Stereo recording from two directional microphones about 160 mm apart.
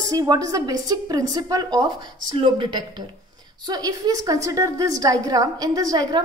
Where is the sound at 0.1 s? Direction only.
20° right (ahead or behind).